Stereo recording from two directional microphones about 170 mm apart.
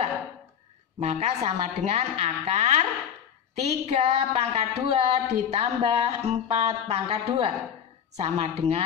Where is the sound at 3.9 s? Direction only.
40° right (ahead or behind).